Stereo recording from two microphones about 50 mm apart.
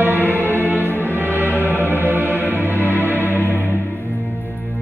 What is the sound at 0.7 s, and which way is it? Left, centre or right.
Music, left.